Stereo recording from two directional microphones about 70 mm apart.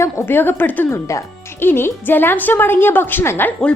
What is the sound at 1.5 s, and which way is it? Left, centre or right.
A woman's voice, left.